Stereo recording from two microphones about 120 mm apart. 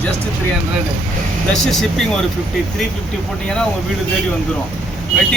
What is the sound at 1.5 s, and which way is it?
Speech, 5° left (ahead or behind).